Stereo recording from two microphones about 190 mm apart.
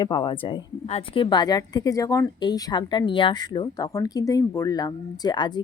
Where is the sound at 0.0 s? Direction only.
25° left (ahead or behind).